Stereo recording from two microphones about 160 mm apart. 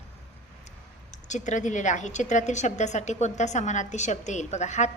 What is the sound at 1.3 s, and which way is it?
A woman's voice, 50° left (ahead or behind).